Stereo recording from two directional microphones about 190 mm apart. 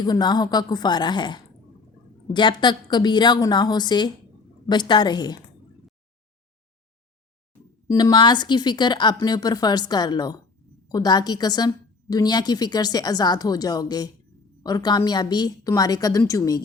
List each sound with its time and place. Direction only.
0.0 s a woman's voice: 20° left (ahead or behind)
7.9 s a woman's voice: 20° left (ahead or behind)